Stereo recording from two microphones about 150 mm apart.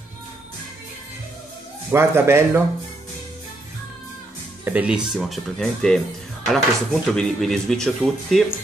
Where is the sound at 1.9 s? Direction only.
15° right (ahead or behind).